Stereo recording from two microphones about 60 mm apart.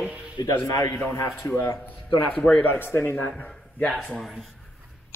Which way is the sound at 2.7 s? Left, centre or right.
Left.